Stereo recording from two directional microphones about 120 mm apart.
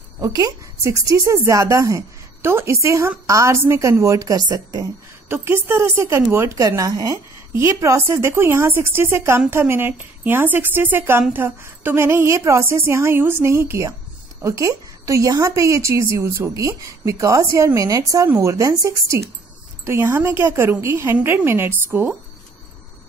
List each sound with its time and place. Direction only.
0.2 s speech: 30° right (ahead or behind)
5.3 s a woman's voice: 20° right (ahead or behind)